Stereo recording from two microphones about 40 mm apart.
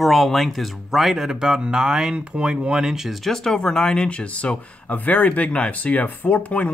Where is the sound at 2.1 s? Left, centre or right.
Right.